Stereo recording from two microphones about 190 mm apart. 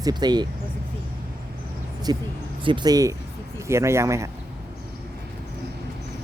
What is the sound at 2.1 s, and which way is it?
Speech, 20° right (ahead or behind).